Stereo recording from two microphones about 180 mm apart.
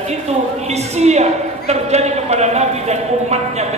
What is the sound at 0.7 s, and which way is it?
A woman's voice, 35° right (ahead or behind).